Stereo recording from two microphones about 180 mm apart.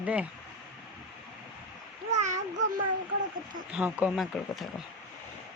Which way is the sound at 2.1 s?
40° right (ahead or behind).